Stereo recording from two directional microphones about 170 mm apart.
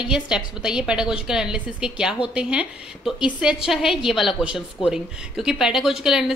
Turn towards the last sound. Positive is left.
turn(degrees=-5)  # may be behind; listen again after turning